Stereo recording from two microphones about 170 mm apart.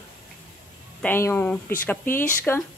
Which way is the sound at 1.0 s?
15° left (ahead or behind).